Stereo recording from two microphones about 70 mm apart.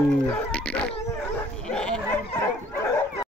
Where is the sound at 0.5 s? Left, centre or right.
Centre.